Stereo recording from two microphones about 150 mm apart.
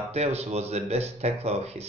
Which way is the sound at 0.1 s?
45° right (ahead or behind).